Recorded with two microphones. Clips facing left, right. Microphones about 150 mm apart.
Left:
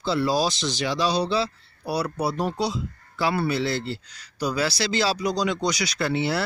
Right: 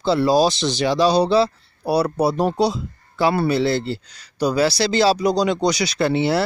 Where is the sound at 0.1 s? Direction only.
30° right (ahead or behind).